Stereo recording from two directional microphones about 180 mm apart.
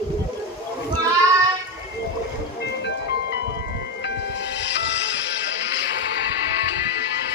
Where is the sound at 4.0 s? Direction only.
75° left (ahead or behind).